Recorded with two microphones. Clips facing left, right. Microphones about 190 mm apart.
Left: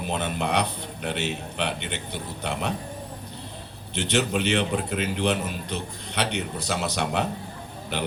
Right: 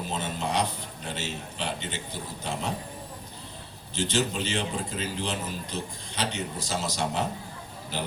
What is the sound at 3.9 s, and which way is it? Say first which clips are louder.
A man's voice: left 3 dB; 65° left (ahead or behind).